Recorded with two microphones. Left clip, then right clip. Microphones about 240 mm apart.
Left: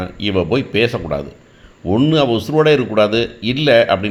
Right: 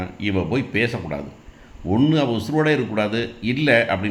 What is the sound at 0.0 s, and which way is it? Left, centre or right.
Speech, left.